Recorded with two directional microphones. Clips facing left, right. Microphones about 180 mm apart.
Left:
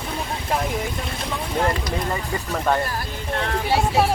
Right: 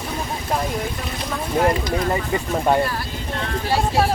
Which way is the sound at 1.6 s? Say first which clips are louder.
Right 4 dB; 20° right (ahead or behind).